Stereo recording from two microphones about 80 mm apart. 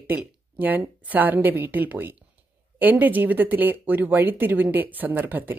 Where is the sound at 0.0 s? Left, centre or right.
Right.